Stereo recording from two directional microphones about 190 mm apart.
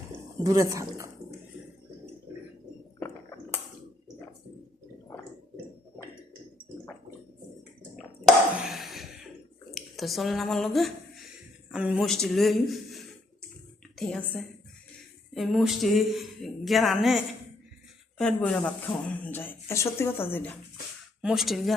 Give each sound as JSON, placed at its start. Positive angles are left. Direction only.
{"t": 0.4, "sound": "speech", "side_deg": -15}
{"t": 7.9, "sound": "a sound", "side_deg": 0}
{"t": 9.7, "sound": "a woman's voice", "side_deg": 0}
{"t": 21.2, "sound": "speech", "side_deg": -5}